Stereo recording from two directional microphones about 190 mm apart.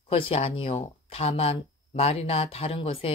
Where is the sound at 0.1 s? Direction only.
30° left (ahead or behind).